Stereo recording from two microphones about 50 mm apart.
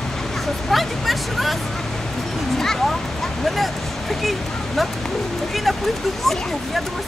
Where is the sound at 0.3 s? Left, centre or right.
Centre.